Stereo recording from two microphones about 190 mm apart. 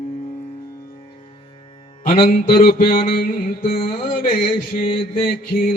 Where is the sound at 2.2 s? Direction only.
50° left (ahead or behind).